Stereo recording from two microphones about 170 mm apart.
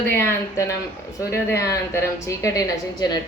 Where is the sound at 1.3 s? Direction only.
15° left (ahead or behind).